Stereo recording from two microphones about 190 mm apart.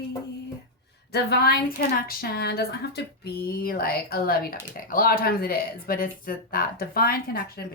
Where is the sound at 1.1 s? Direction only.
55° left (ahead or behind).